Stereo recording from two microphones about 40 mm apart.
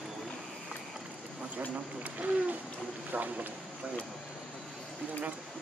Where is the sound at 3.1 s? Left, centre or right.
Right.